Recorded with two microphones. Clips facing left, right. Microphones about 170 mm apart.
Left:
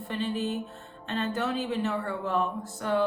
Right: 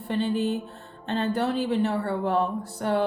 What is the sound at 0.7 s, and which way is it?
Music, 35° right (ahead or behind).